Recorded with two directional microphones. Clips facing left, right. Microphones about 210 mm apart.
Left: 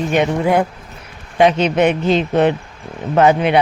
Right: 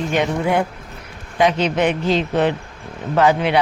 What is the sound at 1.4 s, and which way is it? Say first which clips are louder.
Speech: left 4 dB; 25° left (ahead or behind).